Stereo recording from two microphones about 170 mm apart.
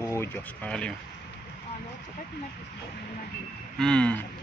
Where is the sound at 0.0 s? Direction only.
15° left (ahead or behind).